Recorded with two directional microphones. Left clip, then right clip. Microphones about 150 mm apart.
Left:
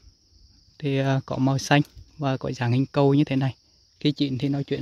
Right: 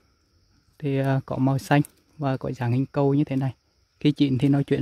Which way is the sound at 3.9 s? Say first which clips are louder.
Right 3 dB; 15° right (ahead or behind).